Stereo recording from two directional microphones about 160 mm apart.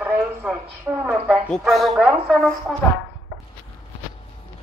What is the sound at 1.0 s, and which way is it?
A woman's voice, 10° right (ahead or behind).